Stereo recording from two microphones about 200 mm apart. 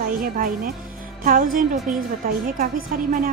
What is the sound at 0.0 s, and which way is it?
Music, 45° right (ahead or behind).